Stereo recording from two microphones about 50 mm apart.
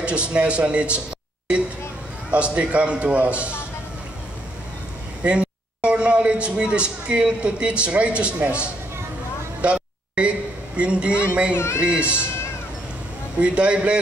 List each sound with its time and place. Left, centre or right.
0.0 s a man's voice: right
2.3 s a man's voice: right
5.2 s a man's voice: right
9.6 s a sound: right
10.8 s a man's voice: right
11.5 s speech: left
11.8 s a man's voice: right
13.4 s a man's voice: right